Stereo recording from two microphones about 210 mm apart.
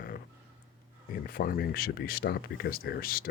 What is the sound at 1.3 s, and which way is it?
Speech, 45° left (ahead or behind).